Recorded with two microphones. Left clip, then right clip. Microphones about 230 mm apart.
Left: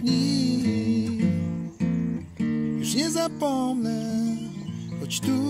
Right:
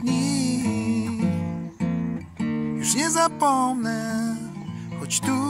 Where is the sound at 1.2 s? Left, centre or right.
Right.